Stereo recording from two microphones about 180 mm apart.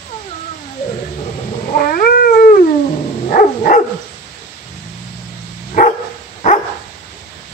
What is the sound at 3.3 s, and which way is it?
Dog, 50° left (ahead or behind).